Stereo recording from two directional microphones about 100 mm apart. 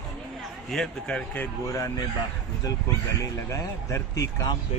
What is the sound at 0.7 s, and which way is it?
Speech, 5° left (ahead or behind).